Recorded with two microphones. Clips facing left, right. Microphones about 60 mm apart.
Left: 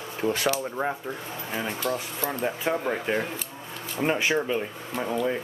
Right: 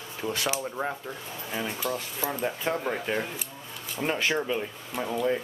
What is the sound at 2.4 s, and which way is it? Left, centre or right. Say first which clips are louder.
Speech: left 3 dB; centre.